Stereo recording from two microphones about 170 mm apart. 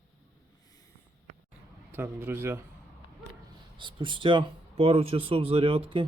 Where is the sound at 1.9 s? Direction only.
10° right (ahead or behind).